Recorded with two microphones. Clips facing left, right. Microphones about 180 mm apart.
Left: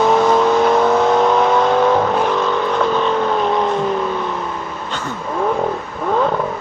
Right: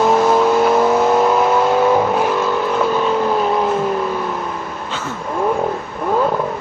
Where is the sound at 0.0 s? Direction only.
5° right (ahead or behind).